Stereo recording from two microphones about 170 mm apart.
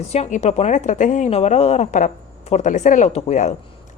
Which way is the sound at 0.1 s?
40° left (ahead or behind).